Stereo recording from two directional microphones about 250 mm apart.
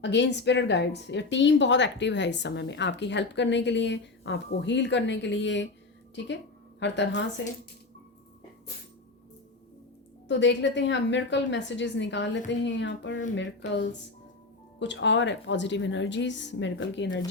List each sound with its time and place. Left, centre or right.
0.0 s speech: left
6.7 s speech: left
10.2 s speech: left